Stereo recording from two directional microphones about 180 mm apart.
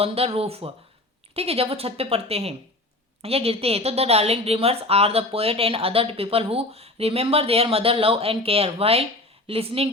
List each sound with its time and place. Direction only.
0.0 s a woman's voice: 35° right (ahead or behind)